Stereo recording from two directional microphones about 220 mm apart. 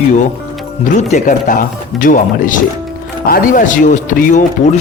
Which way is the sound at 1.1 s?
35° left (ahead or behind).